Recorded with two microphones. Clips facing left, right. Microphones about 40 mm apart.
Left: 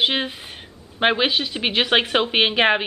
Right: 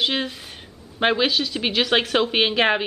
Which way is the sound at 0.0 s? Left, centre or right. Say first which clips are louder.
Left 2 dB; left.